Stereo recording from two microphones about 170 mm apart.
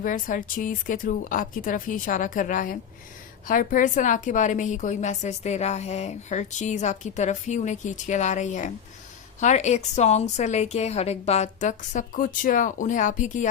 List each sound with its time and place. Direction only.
0.0 s a woman's voice: 50° left (ahead or behind)